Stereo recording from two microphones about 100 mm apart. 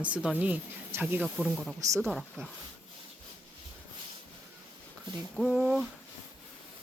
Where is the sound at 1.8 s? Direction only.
30° right (ahead or behind).